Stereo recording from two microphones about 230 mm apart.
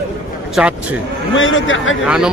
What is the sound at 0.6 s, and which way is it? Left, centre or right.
Speech, centre.